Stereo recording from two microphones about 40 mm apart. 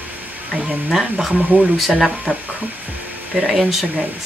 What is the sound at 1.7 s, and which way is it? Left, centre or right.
Speech, centre.